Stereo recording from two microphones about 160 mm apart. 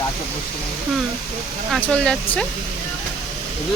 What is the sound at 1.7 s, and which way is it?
Speech, 5° left (ahead or behind).